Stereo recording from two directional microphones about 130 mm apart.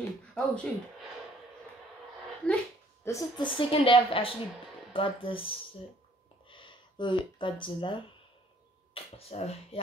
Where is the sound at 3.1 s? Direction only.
30° left (ahead or behind).